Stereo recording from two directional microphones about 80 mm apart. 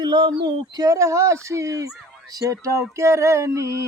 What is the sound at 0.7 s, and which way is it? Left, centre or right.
Speech, right.